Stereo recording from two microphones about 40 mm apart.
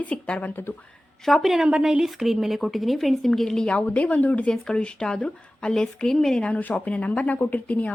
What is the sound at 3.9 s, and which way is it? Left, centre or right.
Speech, left.